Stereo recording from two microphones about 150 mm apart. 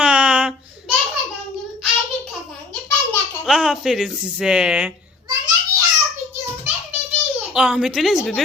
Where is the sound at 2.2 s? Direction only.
10° left (ahead or behind).